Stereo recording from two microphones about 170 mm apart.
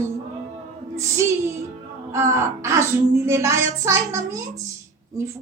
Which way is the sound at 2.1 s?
15° right (ahead or behind).